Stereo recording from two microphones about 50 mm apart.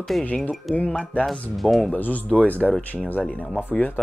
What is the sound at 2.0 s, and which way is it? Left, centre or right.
Speech, left.